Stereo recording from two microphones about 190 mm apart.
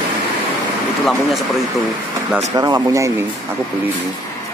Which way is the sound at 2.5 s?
20° right (ahead or behind).